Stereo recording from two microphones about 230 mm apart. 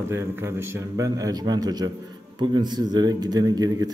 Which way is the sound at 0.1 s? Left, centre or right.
Centre.